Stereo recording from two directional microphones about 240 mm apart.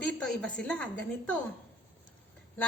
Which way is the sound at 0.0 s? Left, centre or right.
Centre.